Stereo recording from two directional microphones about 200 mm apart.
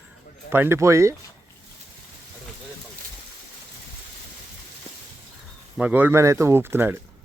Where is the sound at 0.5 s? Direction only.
10° right (ahead or behind).